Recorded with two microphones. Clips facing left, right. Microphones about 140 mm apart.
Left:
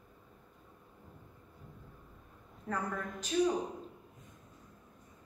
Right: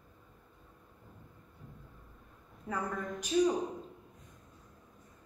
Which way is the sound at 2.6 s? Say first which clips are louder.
Right 1 dB; 10° right (ahead or behind).